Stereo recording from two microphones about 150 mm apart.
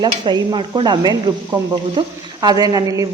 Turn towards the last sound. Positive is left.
turn(degrees=-25)  # may be behind; listen again after turning